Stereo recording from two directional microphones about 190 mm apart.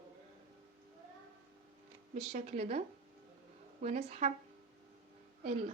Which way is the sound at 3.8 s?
40° right (ahead or behind).